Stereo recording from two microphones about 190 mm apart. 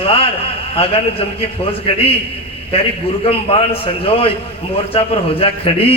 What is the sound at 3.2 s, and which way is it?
A man's voice, 30° left (ahead or behind).